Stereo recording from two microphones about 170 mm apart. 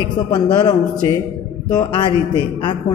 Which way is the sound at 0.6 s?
20° left (ahead or behind).